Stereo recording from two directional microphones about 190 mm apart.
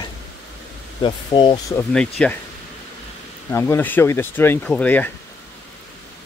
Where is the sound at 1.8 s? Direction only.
5° left (ahead or behind).